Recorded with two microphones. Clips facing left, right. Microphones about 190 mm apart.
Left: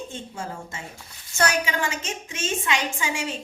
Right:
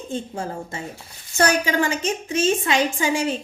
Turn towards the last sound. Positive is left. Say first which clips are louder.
# right 6 dB
turn(degrees=-35)  # may be behind; listen again after turning